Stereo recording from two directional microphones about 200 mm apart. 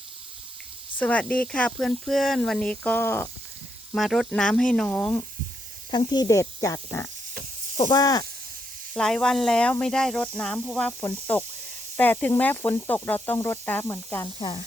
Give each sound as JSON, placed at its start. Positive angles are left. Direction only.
{"t": 0.9, "sound": "speech", "side_deg": 5}
{"t": 3.9, "sound": "speech", "side_deg": 0}
{"t": 6.1, "sound": "snake", "side_deg": 20}
{"t": 8.9, "sound": "speech", "side_deg": 5}
{"t": 11.0, "sound": "snake", "side_deg": 10}